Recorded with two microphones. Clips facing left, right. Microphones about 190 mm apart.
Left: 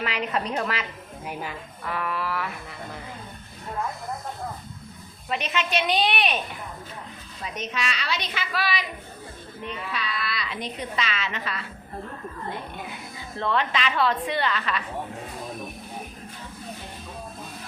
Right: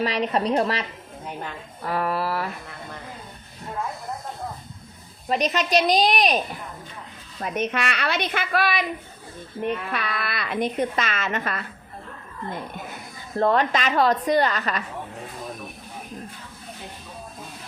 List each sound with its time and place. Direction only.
0.0 s a woman's voice: 35° right (ahead or behind)
1.2 s speech: 5° left (ahead or behind)
1.8 s a woman's voice: 40° right (ahead or behind)
5.3 s a woman's voice: 40° right (ahead or behind)
7.4 s a woman's voice: 55° right (ahead or behind)
12.7 s speech: 45° right (ahead or behind)